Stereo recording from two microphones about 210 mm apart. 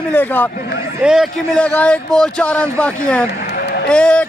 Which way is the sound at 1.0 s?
Centre (ahead or behind).